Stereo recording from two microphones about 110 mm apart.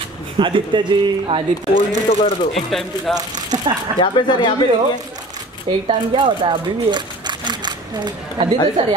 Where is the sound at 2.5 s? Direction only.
5° left (ahead or behind).